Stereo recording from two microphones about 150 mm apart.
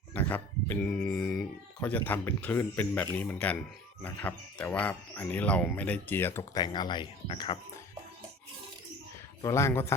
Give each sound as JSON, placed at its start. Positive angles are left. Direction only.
{"t": 0.1, "sound": "speech", "side_deg": 10}
{"t": 6.6, "sound": "speech", "side_deg": 30}
{"t": 9.4, "sound": "speech", "side_deg": 20}